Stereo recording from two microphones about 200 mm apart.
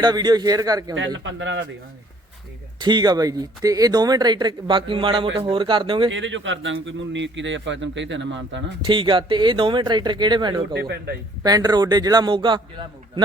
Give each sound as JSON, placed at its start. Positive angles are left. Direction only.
{"t": 0.0, "sound": "speech", "side_deg": -20}
{"t": 0.9, "sound": "speech", "side_deg": -70}
{"t": 2.7, "sound": "speech", "side_deg": -20}
{"t": 6.1, "sound": "a man's voice", "side_deg": -70}
{"t": 8.8, "sound": "speech", "side_deg": -25}
{"t": 10.8, "sound": "a man's voice", "side_deg": -55}
{"t": 11.4, "sound": "speech", "side_deg": -20}